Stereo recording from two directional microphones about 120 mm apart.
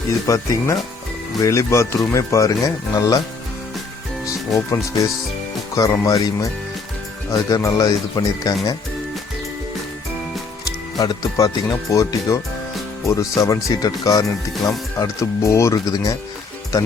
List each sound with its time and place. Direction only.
0.3 s speech: 30° left (ahead or behind)
4.3 s speech: 25° left (ahead or behind)
10.9 s speech: 30° left (ahead or behind)